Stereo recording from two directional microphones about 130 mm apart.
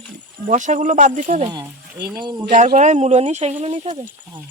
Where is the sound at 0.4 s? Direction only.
75° right (ahead or behind).